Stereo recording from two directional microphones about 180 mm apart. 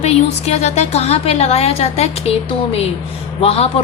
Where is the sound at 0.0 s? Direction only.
35° left (ahead or behind).